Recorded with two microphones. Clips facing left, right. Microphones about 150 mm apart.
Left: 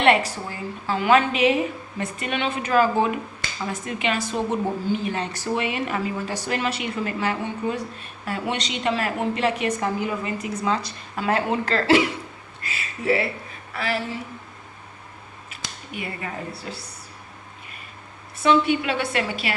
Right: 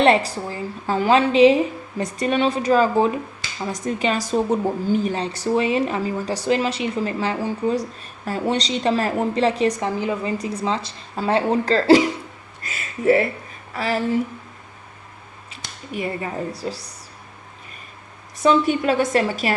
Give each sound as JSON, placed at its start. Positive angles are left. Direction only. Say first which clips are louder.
{"t": 0.0, "sound": "a woman's voice", "louder": "right 3 dB", "side_deg": -35}
{"t": 1.1, "sound": "a woman's voice", "louder": "right 5 dB", "side_deg": -30}
{"t": 12.6, "sound": "a woman's voice", "louder": "right 5 dB", "side_deg": -45}
{"t": 15.9, "sound": "a woman's voice", "louder": "right 6 dB", "side_deg": -35}
{"t": 18.4, "sound": "a woman's voice", "louder": "right 2 dB", "side_deg": -40}